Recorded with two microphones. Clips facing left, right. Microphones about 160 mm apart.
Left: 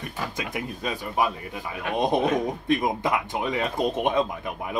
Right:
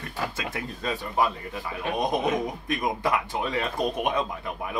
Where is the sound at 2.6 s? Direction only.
20° left (ahead or behind).